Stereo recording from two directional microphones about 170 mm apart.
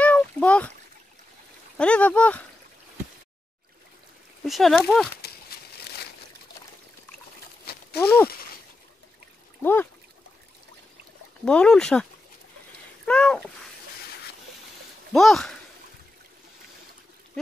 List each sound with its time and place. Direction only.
0.0 s a sound: 10° left (ahead or behind)
1.8 s speech: 5° left (ahead or behind)
4.5 s speech: centre (ahead or behind)
7.7 s a sound: 65° left (ahead or behind)
8.0 s speech: 10° left (ahead or behind)
9.6 s speech: 10° left (ahead or behind)
11.4 s speech: 5° left (ahead or behind)
15.1 s speech: centre (ahead or behind)